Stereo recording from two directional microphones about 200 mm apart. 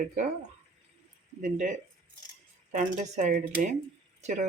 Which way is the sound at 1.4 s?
40° right (ahead or behind).